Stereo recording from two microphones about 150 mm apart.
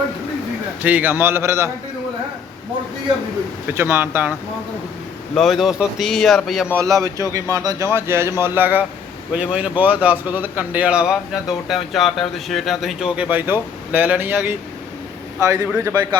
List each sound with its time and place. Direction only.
0.8 s speech: 10° right (ahead or behind)
3.7 s speech: 15° right (ahead or behind)
5.3 s speech: centre (ahead or behind)
6.7 s a man's voice: 20° right (ahead or behind)